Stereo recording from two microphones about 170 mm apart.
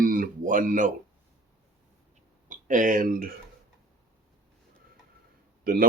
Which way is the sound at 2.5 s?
50° right (ahead or behind).